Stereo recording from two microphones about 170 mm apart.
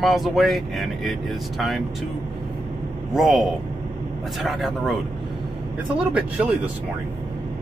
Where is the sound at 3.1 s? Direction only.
Centre (ahead or behind).